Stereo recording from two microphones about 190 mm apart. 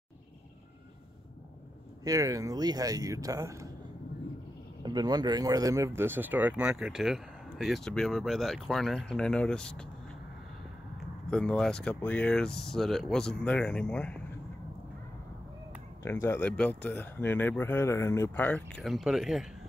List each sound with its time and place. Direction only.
2.0 s speech: 20° right (ahead or behind)
4.8 s speech: 20° right (ahead or behind); by 9.8 s 5° left (ahead or behind)
11.2 s speech: 5° left (ahead or behind)
16.0 s speech: 15° left (ahead or behind); by 19.4 s centre (ahead or behind)